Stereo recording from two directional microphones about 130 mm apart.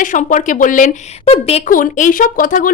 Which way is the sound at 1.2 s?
50° left (ahead or behind).